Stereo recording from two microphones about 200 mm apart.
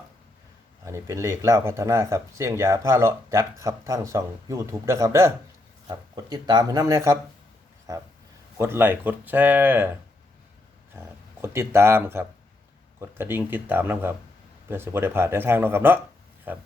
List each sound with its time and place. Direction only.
0.9 s speech: 15° right (ahead or behind)
11.4 s speech: 15° right (ahead or behind)